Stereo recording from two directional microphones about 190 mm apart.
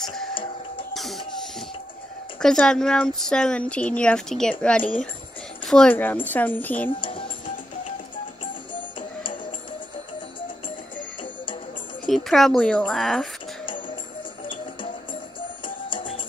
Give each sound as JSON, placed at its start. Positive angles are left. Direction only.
{"t": 0.0, "sound": "music", "side_deg": 0}
{"t": 2.4, "sound": "speech", "side_deg": 5}
{"t": 7.0, "sound": "music", "side_deg": 30}
{"t": 12.1, "sound": "speech", "side_deg": 0}
{"t": 15.6, "sound": "music", "side_deg": 25}